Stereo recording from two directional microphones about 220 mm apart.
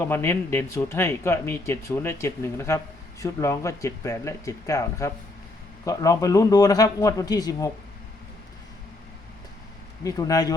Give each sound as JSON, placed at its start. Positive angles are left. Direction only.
{"t": 0.0, "sound": "speech", "side_deg": 10}
{"t": 10.0, "sound": "speech", "side_deg": 15}